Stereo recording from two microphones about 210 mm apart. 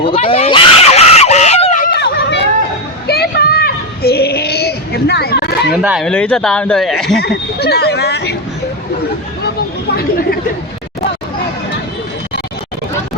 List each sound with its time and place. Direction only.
0.0 s screaming: 25° left (ahead or behind)
2.0 s hubbub: 55° left (ahead or behind)
3.1 s child singing: 50° left (ahead or behind)
5.7 s speech: 5° right (ahead or behind)
7.2 s speech: 50° left (ahead or behind)
9.9 s speech: 45° left (ahead or behind)